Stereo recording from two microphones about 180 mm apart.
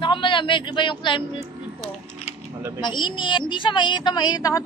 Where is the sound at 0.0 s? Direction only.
30° left (ahead or behind).